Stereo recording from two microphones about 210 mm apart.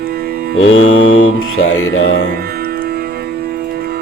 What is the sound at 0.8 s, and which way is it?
Music, 65° left (ahead or behind).